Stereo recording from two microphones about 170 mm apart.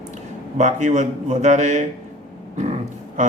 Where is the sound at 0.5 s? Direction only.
45° right (ahead or behind).